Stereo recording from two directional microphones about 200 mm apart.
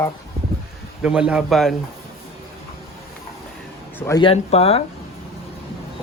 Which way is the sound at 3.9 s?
10° left (ahead or behind).